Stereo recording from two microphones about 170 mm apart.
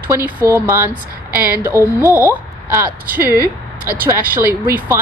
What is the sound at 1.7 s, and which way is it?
Speech, 15° left (ahead or behind).